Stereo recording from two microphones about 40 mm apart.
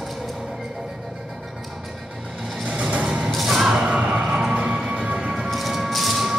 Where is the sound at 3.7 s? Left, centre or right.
Right.